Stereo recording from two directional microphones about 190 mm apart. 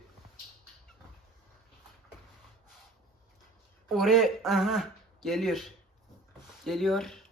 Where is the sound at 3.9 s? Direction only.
Centre (ahead or behind).